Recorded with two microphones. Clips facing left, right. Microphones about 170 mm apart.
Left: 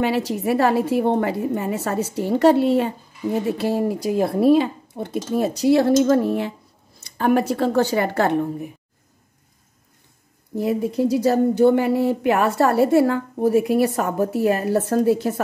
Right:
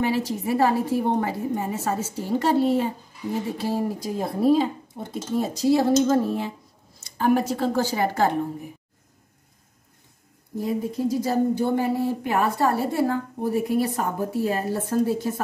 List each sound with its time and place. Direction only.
0.0 s speech: 70° left (ahead or behind)
10.6 s speech: 75° left (ahead or behind)